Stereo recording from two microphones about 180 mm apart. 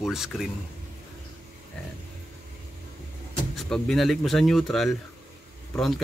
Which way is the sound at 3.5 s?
Centre (ahead or behind).